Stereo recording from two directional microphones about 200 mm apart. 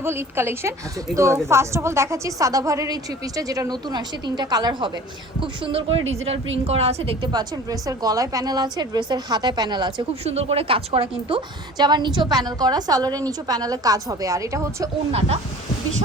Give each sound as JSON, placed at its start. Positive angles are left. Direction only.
{"t": 0.0, "sound": "a woman's voice", "side_deg": -10}